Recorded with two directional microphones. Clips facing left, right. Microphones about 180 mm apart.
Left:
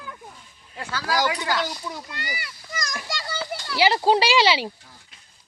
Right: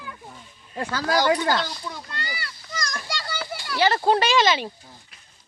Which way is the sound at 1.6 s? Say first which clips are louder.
Left 2 dB; 10° left (ahead or behind).